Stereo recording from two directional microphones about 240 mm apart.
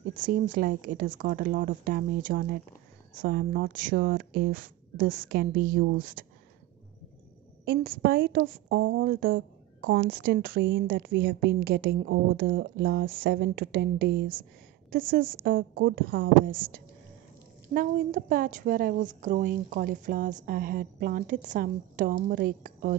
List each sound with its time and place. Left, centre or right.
0.2 s a woman's voice: right
7.6 s a woman's voice: right